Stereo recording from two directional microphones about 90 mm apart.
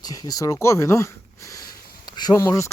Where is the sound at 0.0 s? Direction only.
45° left (ahead or behind).